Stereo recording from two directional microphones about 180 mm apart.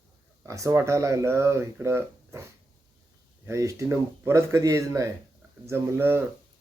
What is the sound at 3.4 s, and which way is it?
Speech, 15° right (ahead or behind).